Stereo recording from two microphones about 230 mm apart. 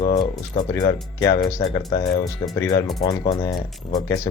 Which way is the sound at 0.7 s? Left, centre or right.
Centre.